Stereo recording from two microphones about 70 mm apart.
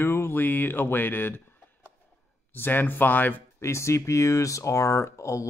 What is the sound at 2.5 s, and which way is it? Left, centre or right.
Speech, left.